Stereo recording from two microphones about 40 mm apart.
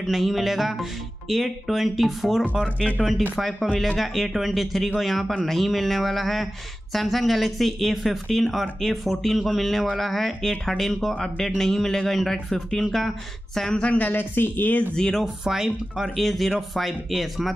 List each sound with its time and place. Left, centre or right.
0.0 s a man's voice: centre
13.7 s speech: left
14.1 s speech: left
15.4 s speech: centre
16.2 s speech: centre